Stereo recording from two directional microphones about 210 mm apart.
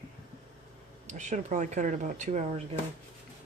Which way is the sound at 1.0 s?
35° right (ahead or behind).